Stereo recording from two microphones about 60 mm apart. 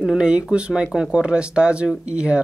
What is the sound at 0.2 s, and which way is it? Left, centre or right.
Speech, centre.